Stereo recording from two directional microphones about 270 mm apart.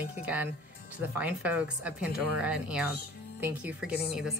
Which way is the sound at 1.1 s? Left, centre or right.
Centre.